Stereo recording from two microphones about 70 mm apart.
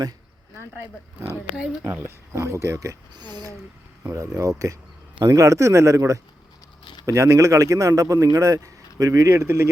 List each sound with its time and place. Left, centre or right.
1.5 s speech: centre
1.8 s speech: right
4.1 s speech: right